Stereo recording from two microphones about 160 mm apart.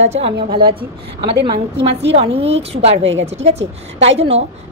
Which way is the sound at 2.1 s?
40° right (ahead or behind).